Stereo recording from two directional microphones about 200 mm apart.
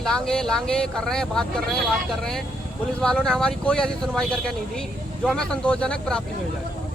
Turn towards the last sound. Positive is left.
turn(degrees=5)  # may be behind; listen again after turning